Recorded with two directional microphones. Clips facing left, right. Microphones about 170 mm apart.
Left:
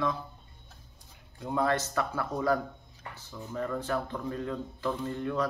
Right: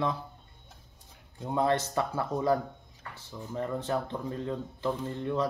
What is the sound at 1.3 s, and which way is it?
Speech, 25° right (ahead or behind).